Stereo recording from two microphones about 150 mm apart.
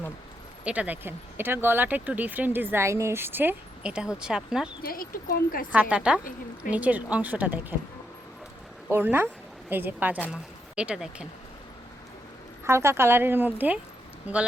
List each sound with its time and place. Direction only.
0.6 s speech: 10° right (ahead or behind)
4.8 s speech: 70° left (ahead or behind)
5.7 s speech: 10° right (ahead or behind)
8.9 s speech: 15° right (ahead or behind)
12.6 s speech: 15° right (ahead or behind)